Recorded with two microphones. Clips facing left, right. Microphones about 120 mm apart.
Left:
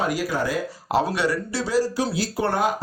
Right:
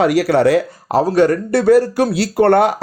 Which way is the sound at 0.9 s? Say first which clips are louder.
Right 9 dB; 40° right (ahead or behind).